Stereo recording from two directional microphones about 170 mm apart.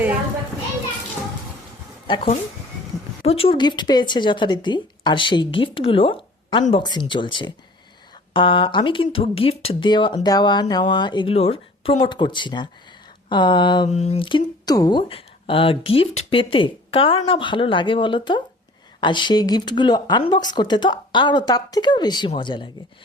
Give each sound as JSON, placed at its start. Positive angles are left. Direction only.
{"t": 2.0, "sound": "a woman's voice", "side_deg": 30}